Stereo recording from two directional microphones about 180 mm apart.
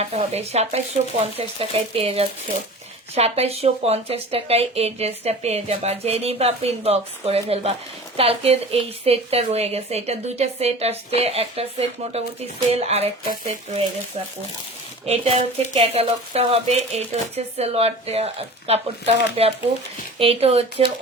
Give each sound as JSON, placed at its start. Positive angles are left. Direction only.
{"t": 0.0, "sound": "speech", "side_deg": -35}
{"t": 15.0, "sound": "speech", "side_deg": -35}